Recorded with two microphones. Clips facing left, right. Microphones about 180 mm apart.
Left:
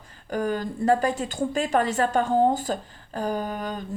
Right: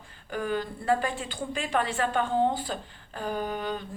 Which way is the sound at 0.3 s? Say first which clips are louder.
Left 4 dB; 40° left (ahead or behind).